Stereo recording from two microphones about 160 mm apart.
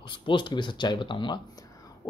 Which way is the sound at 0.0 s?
30° left (ahead or behind).